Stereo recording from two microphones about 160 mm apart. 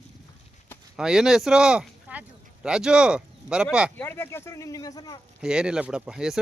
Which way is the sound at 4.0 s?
15° left (ahead or behind).